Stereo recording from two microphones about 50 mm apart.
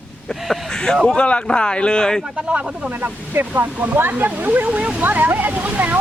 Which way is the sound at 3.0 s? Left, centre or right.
Right.